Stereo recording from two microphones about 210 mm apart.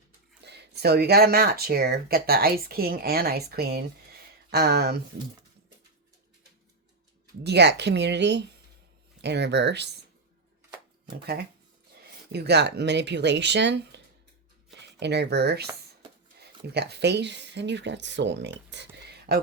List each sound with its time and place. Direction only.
0.4 s speech: 50° right (ahead or behind)
7.4 s speech: 55° right (ahead or behind)
11.9 s speech: 50° right (ahead or behind)
19.0 s a sound: 50° right (ahead or behind)